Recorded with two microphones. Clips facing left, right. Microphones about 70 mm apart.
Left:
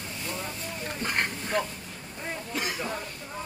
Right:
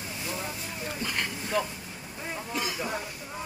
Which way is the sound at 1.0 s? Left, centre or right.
Left.